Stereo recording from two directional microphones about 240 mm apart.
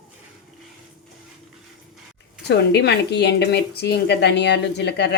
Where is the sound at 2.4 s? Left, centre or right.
Left.